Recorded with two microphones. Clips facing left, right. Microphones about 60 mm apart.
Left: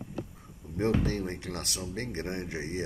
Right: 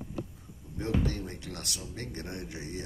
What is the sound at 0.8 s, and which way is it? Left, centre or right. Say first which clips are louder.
Speech: left 4 dB; left.